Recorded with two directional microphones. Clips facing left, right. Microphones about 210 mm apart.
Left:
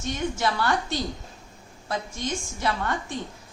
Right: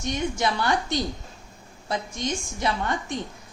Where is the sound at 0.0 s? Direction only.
15° right (ahead or behind).